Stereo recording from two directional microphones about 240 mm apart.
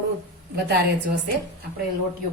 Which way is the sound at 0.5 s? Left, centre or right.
Right.